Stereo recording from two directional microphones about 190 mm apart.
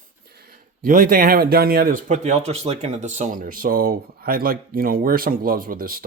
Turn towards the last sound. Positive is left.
turn(degrees=-50)  # may be behind; listen again after turning